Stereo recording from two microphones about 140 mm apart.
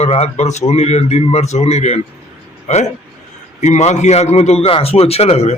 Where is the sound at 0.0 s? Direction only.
50° left (ahead or behind).